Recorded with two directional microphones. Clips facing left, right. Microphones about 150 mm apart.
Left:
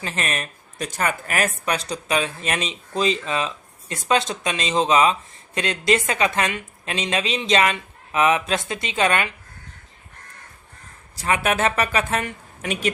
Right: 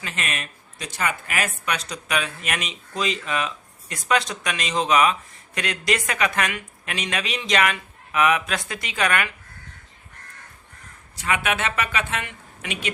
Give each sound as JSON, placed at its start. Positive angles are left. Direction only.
{"t": 0.0, "sound": "speech", "side_deg": 35}
{"t": 11.2, "sound": "speech", "side_deg": 35}